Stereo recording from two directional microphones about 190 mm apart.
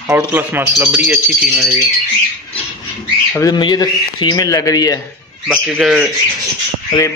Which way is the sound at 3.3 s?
20° left (ahead or behind).